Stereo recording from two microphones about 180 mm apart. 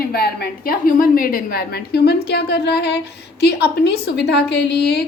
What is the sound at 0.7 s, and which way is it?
A woman's voice, 50° left (ahead or behind).